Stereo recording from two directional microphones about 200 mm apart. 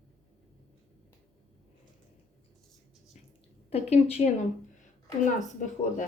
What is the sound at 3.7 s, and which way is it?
Speech, 30° left (ahead or behind).